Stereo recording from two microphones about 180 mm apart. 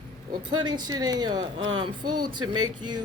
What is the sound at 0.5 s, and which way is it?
Speech, 25° right (ahead or behind).